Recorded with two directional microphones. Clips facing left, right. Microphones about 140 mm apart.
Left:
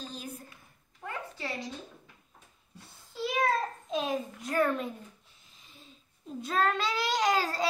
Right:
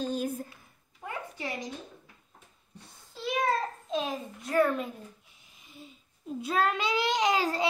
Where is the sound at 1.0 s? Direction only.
15° right (ahead or behind).